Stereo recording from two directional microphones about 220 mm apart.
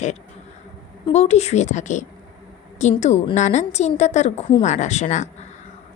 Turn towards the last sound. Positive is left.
turn(degrees=35)  # may be behind; listen again after turning